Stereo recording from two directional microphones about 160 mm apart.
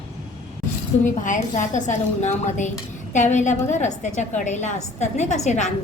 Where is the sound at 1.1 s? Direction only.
50° left (ahead or behind).